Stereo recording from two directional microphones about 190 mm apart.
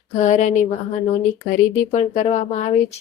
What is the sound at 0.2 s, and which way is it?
Speech, 40° left (ahead or behind).